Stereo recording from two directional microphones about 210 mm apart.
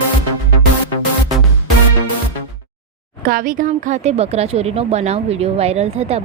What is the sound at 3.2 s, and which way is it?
A woman's voice, 40° right (ahead or behind).